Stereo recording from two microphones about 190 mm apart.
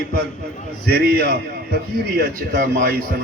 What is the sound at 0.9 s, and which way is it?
A man's voice, 55° right (ahead or behind).